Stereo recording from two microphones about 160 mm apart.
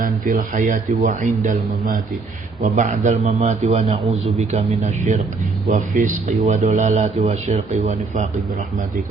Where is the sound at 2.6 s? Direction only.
50° right (ahead or behind).